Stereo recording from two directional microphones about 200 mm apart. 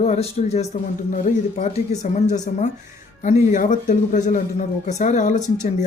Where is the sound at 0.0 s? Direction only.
30° left (ahead or behind).